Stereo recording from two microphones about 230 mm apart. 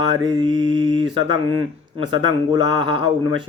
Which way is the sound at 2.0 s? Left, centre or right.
Right.